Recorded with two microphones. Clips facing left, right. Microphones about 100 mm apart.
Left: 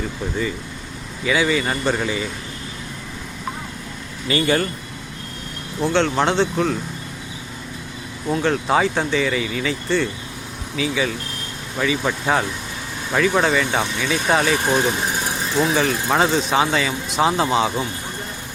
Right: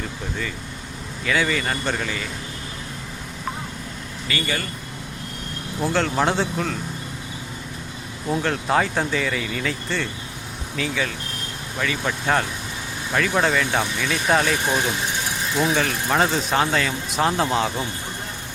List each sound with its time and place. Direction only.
1.2 s speech: 5° left (ahead or behind)
4.3 s speech: 35° left (ahead or behind)
5.8 s speech: 5° right (ahead or behind)
8.3 s speech: centre (ahead or behind)